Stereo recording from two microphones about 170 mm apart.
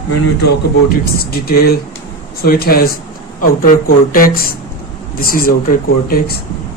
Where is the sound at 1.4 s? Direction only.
65° left (ahead or behind).